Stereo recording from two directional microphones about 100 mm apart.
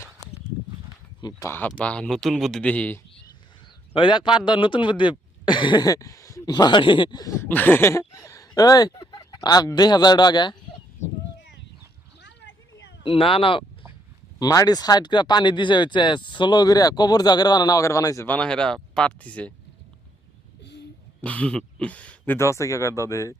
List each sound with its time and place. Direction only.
1.5 s speech: 20° left (ahead or behind)
3.9 s speech: 55° left (ahead or behind); by 6.5 s 30° left (ahead or behind)
6.5 s speech: 45° left (ahead or behind)
7.2 s speech: 35° left (ahead or behind)
7.4 s speech: 20° left (ahead or behind); by 10.6 s 45° left (ahead or behind)
13.0 s speech: 65° left (ahead or behind)
14.3 s speech: 40° left (ahead or behind)
18.3 s speech: 10° left (ahead or behind)
21.2 s speech: 15° left (ahead or behind)
22.4 s speech: 30° left (ahead or behind)